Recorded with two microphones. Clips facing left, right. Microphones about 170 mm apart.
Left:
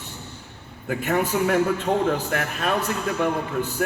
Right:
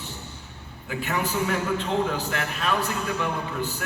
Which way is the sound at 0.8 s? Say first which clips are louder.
Left 5 dB; 50° left (ahead or behind).